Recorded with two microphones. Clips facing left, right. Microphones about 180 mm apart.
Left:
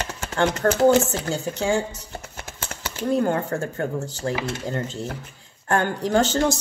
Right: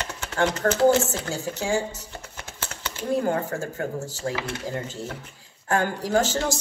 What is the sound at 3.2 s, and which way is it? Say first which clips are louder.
Speech: left 2 dB; 5° right (ahead or behind).